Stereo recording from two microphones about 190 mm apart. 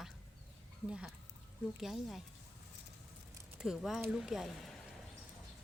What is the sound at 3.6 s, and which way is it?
Speech, centre (ahead or behind).